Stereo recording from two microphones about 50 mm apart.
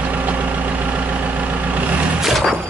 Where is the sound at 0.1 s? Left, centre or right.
Right.